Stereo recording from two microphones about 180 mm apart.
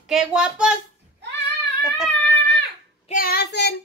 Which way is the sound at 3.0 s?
55° left (ahead or behind).